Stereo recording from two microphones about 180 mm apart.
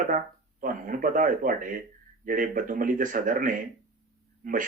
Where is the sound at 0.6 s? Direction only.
50° right (ahead or behind).